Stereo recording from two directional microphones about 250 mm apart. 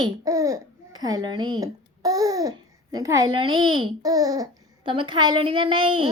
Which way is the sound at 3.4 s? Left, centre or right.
Right.